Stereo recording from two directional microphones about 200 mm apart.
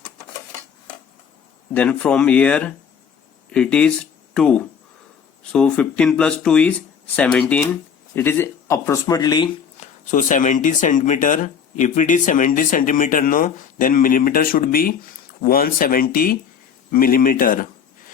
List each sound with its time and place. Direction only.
1.7 s speech: 5° left (ahead or behind)
9.8 s speech: 40° left (ahead or behind)